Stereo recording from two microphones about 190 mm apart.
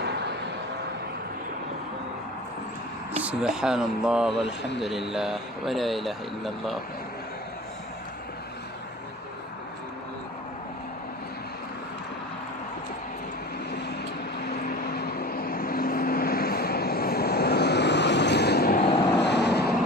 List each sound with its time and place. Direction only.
0.0 s vehicle: 65° right (ahead or behind)
3.1 s speech: 5° right (ahead or behind)
14.5 s vehicle: 55° left (ahead or behind)
18.8 s vehicle: 30° left (ahead or behind)
19.2 s vehicle: 65° left (ahead or behind)